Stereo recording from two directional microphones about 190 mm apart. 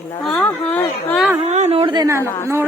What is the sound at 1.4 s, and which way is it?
Speech, 35° right (ahead or behind).